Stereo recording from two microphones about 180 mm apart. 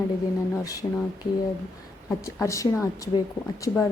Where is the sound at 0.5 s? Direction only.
20° left (ahead or behind).